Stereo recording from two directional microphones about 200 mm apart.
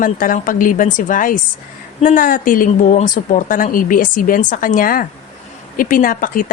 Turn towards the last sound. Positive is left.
turn(degrees=45)  # may be behind; listen again after turning